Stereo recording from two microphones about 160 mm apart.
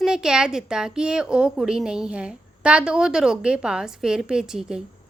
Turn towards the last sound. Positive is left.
turn(degrees=-5)  # may be behind; listen again after turning